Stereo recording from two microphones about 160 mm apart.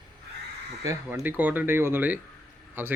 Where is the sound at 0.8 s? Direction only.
20° right (ahead or behind).